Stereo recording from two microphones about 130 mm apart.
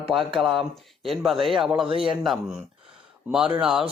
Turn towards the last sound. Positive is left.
turn(degrees=-5)  # may be behind; listen again after turning